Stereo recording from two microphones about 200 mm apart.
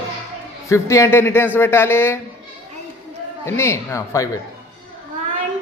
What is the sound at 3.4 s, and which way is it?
Speech, 15° left (ahead or behind).